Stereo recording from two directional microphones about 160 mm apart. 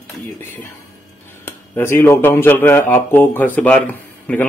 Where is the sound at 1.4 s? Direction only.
15° left (ahead or behind).